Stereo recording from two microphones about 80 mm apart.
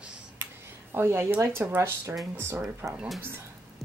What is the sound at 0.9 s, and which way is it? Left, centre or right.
Speech, right.